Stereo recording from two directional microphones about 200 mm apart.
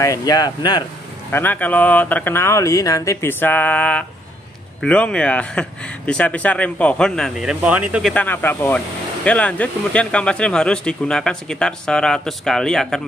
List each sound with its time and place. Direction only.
0.0 s speech: 15° left (ahead or behind)
1.3 s speech: 10° left (ahead or behind); by 8.1 s 5° right (ahead or behind)
8.1 s speech: 10° left (ahead or behind)